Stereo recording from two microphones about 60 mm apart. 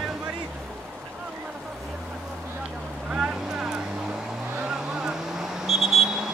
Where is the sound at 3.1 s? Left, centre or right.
Centre.